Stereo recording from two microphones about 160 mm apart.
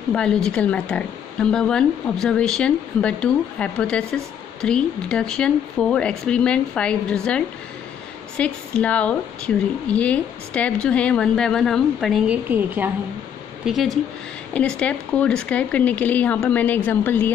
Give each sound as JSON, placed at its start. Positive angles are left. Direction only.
{"t": 0.1, "sound": "speech", "side_deg": 5}
{"t": 8.4, "sound": "speech", "side_deg": 5}
{"t": 12.4, "sound": "a woman's voice", "side_deg": -10}
{"t": 13.7, "sound": "speech", "side_deg": 0}